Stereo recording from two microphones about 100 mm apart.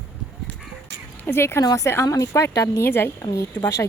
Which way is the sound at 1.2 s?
25° left (ahead or behind).